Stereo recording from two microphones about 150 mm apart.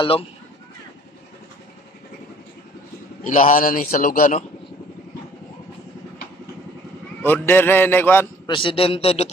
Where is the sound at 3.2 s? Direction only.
60° left (ahead or behind).